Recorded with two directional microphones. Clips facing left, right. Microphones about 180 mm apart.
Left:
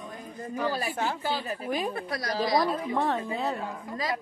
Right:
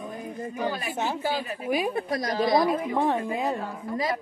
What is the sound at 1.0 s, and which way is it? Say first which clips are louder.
A woman's voice: right 2 dB; 20° right (ahead or behind).